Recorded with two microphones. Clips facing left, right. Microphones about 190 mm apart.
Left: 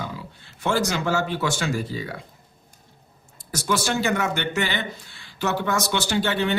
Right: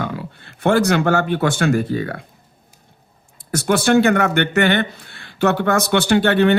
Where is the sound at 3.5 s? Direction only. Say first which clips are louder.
Right 9 dB; 60° right (ahead or behind).